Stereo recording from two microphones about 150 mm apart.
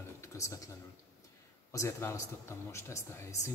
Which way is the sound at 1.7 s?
20° left (ahead or behind).